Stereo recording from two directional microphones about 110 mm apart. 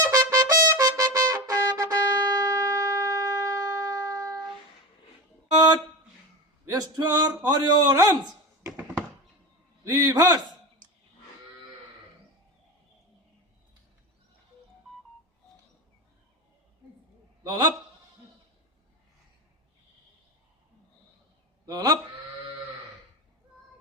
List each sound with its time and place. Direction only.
0.0 s trumpet: 30° right (ahead or behind)
0.7 s music: 30° right (ahead or behind)
6.7 s a man's voice: 35° right (ahead or behind)
9.9 s a man's voice: 35° right (ahead or behind)
17.4 s a sound: 40° right (ahead or behind)
21.7 s a sound: 35° right (ahead or behind)